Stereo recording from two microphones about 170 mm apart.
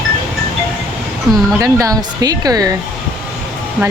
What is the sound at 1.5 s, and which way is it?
Speech, 20° right (ahead or behind).